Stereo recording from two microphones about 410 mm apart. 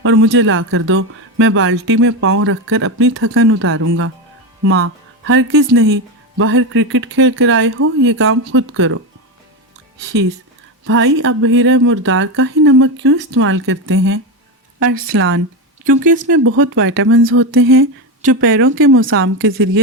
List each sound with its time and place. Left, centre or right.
0.0 s speech: right
10.8 s speech: right